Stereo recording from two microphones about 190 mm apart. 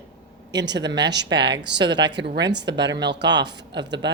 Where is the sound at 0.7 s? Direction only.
65° right (ahead or behind).